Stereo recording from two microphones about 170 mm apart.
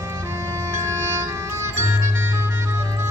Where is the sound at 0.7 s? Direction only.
15° right (ahead or behind).